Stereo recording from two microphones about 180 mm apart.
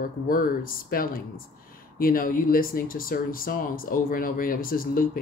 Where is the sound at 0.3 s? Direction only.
50° left (ahead or behind).